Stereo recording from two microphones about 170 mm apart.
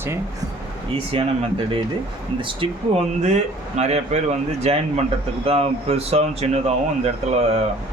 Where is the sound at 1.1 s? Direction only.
35° right (ahead or behind).